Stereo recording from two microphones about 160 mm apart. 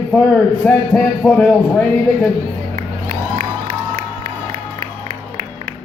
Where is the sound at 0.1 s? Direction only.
10° left (ahead or behind).